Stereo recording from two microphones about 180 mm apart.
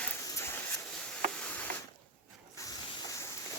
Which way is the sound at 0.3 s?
15° left (ahead or behind).